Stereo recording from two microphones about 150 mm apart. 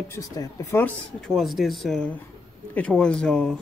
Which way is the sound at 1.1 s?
Centre (ahead or behind).